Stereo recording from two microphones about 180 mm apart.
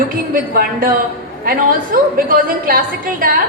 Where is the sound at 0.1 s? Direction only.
50° right (ahead or behind).